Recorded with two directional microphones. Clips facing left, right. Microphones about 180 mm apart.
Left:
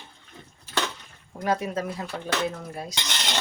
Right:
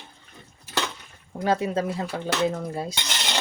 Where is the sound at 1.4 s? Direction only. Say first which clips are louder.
Right 3 dB; 30° right (ahead or behind).